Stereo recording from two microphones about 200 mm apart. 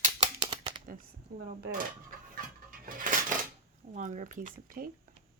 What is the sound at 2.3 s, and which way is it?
Dishes, 45° right (ahead or behind).